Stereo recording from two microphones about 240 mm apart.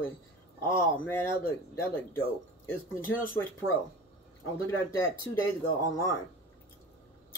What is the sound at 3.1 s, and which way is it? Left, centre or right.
Speech, left.